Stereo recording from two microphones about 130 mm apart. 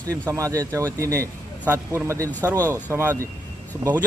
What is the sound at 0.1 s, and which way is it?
A man's voice, 25° right (ahead or behind).